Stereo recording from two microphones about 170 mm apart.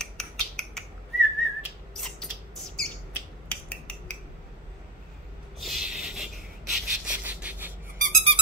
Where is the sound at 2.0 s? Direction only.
5° left (ahead or behind).